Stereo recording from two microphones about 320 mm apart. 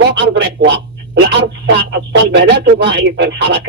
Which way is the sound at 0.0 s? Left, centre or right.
Right.